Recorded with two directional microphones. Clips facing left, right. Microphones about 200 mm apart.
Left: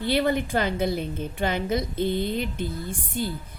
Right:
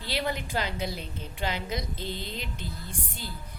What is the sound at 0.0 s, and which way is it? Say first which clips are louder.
A woman's voice: left 9 dB; 55° left (ahead or behind).